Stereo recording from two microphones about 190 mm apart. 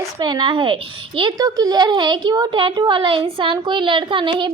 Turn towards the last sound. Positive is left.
turn(degrees=-25)  # may be behind; listen again after turning